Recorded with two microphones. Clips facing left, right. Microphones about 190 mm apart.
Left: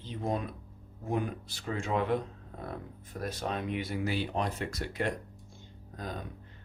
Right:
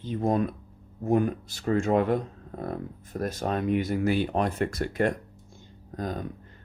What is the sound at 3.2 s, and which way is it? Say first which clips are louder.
Speech: right 6 dB; 45° right (ahead or behind).